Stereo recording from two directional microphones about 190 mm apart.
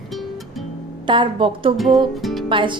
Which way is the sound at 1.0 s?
25° right (ahead or behind).